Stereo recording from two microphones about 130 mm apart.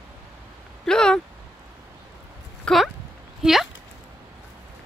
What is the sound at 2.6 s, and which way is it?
Speech, centre (ahead or behind).